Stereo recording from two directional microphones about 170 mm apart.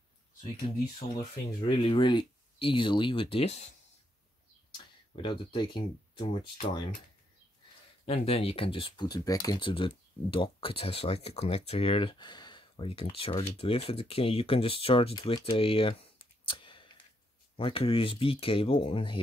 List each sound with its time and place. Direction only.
1.8 s speech: 30° left (ahead or behind)
5.1 s speech: 30° left (ahead or behind)
8.0 s speech: 35° left (ahead or behind)